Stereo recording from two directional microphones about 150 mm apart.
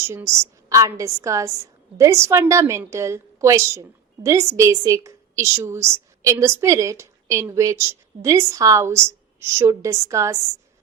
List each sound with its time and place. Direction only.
0.0 s a woman's voice: 15° right (ahead or behind)